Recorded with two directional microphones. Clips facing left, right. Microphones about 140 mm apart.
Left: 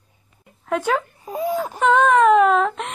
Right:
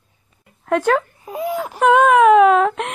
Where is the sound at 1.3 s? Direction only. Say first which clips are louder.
Even; 15° right (ahead or behind).